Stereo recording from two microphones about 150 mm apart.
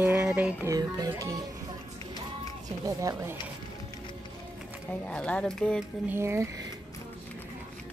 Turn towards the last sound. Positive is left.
turn(degrees=-20)  # may be behind; listen again after turning